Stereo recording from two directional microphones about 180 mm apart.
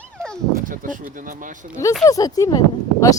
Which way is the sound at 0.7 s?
50° right (ahead or behind).